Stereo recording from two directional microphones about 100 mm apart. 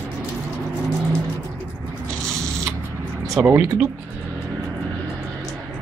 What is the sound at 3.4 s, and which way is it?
Speech, 15° right (ahead or behind).